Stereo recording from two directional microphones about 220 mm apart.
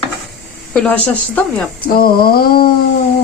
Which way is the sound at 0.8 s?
5° left (ahead or behind).